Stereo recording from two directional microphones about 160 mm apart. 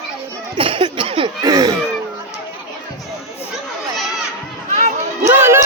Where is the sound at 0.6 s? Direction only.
35° right (ahead or behind).